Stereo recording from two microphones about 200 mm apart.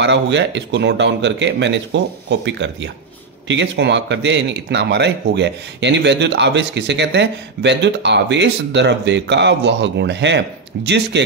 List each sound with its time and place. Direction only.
0.0 s speech: 60° right (ahead or behind)